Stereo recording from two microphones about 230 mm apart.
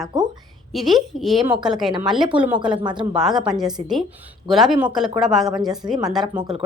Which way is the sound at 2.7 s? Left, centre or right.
Centre.